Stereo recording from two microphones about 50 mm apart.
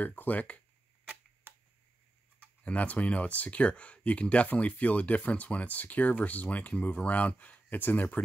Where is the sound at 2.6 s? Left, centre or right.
Left.